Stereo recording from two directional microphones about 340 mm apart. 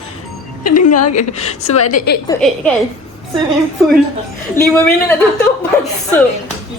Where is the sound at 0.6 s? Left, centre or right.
Left.